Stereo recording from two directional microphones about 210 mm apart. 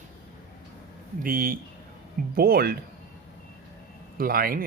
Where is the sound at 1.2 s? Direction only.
40° right (ahead or behind).